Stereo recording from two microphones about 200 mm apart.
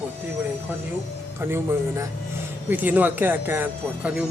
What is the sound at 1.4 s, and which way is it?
Speech, 10° right (ahead or behind).